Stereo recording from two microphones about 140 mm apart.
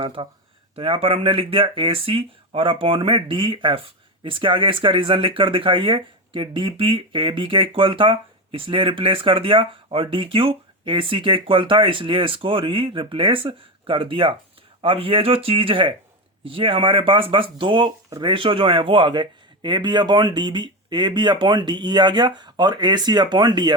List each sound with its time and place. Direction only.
0.0 s speech: 40° right (ahead or behind)